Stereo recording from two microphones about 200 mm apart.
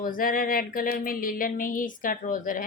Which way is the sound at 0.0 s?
45° left (ahead or behind).